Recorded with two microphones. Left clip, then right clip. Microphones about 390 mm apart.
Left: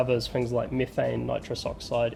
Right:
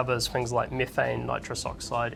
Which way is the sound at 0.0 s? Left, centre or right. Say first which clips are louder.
Left 1 dB; right.